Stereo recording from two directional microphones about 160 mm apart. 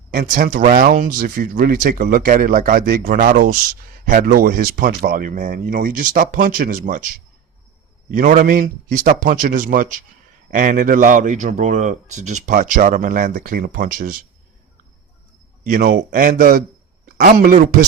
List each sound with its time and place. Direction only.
0.1 s speech: 65° right (ahead or behind)
8.1 s speech: 55° right (ahead or behind)
15.7 s speech: 60° right (ahead or behind)